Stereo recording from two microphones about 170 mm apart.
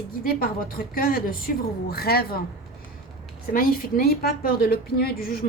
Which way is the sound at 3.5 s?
55° left (ahead or behind).